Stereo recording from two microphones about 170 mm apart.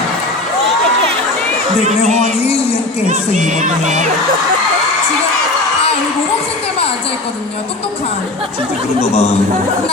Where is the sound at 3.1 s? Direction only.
45° right (ahead or behind).